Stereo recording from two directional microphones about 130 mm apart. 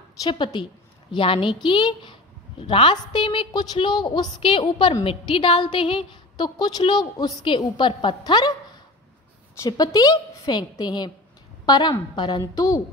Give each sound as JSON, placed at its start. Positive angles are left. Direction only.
{"t": 0.2, "sound": "a woman's voice", "side_deg": 35}
{"t": 9.6, "sound": "a woman's voice", "side_deg": 30}